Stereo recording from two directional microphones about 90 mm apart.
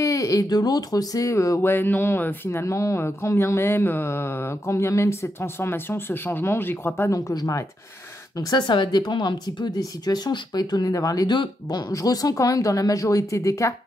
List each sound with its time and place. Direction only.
0.0 s speech: 40° left (ahead or behind)
1.6 s speech: 25° left (ahead or behind)
7.1 s speech: 35° left (ahead or behind)
8.4 s speech: 50° left (ahead or behind)
11.3 s speech: 55° left (ahead or behind)
11.9 s speech: 40° left (ahead or behind)